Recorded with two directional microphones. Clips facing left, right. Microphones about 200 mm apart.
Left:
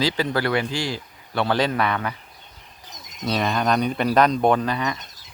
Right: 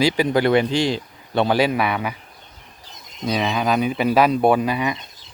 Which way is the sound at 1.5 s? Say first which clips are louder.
Right 3 dB; 10° right (ahead or behind).